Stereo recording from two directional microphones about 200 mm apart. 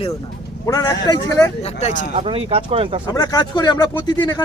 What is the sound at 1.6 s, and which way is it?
Speech, 35° left (ahead or behind).